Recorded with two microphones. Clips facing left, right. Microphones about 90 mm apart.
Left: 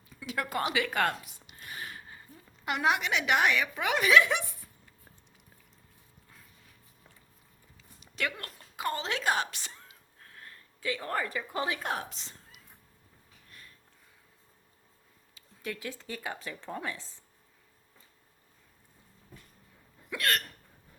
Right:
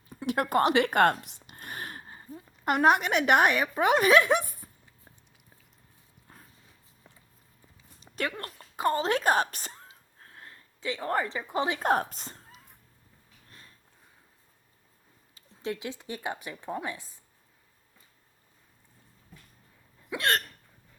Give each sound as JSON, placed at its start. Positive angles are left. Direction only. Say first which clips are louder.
{"t": 0.1, "sound": "a woman's voice", "louder": "right 7 dB", "side_deg": -50}
{"t": 1.5, "sound": "a sound", "louder": "right 3 dB", "side_deg": -45}
{"t": 2.7, "sound": "a woman's voice", "louder": "right 5 dB", "side_deg": -50}
{"t": 6.2, "sound": "horse", "louder": "right 5 dB", "side_deg": -35}
{"t": 7.9, "sound": "a sound", "louder": "right 2 dB", "side_deg": -35}
{"t": 8.7, "sound": "speech", "louder": "right 7 dB", "side_deg": -35}
{"t": 11.8, "sound": "a woman's voice", "louder": "right 9 dB", "side_deg": -45}
{"t": 13.5, "sound": "sniff", "louder": "even", "side_deg": -30}
{"t": 15.6, "sound": "a woman's voice", "louder": "right 4 dB", "side_deg": -20}
{"t": 20.1, "sound": "hiccup", "louder": "right 3 dB", "side_deg": -25}